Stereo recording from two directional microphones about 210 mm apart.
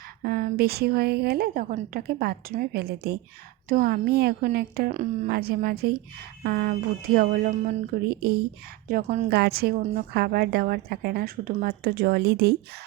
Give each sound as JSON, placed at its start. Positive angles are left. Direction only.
{"t": 0.2, "sound": "a woman's voice", "side_deg": -45}
{"t": 4.9, "sound": "a woman's voice", "side_deg": -35}
{"t": 8.0, "sound": "a woman's voice", "side_deg": -50}
{"t": 8.9, "sound": "a woman's voice", "side_deg": -35}
{"t": 9.3, "sound": "a woman's voice", "side_deg": -50}